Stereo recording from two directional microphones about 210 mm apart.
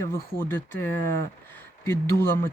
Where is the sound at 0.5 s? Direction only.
10° left (ahead or behind).